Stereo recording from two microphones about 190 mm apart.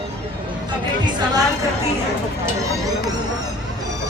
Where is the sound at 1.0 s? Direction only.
25° right (ahead or behind).